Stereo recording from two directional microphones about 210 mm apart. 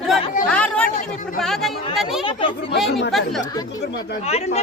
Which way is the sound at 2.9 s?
55° left (ahead or behind).